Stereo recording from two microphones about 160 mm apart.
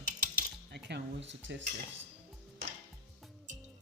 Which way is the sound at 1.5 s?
90° right.